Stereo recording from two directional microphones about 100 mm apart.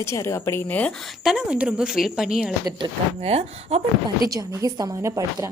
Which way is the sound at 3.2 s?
90° right.